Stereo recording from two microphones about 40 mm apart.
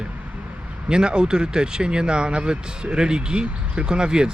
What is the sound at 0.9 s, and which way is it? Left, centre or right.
Speech, right.